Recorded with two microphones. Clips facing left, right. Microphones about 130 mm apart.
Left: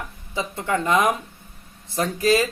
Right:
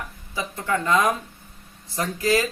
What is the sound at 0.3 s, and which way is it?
Speech, 20° left (ahead or behind).